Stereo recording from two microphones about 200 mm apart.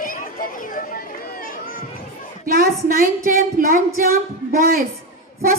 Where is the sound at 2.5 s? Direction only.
45° right (ahead or behind).